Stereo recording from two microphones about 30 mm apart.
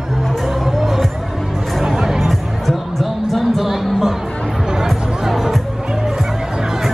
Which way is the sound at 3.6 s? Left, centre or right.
Centre.